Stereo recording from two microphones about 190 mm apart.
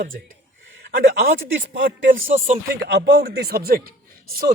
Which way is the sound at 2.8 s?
60° right (ahead or behind).